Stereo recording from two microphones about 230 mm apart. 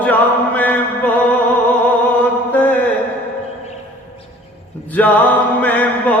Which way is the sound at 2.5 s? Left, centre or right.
Centre.